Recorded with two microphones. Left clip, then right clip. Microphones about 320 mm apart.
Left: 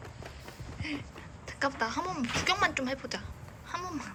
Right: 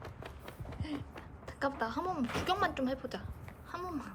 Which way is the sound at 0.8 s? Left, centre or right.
Right.